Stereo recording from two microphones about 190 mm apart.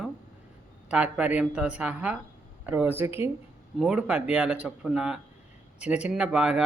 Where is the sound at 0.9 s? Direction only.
5° right (ahead or behind).